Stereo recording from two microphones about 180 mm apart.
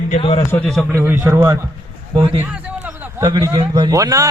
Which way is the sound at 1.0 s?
10° right (ahead or behind).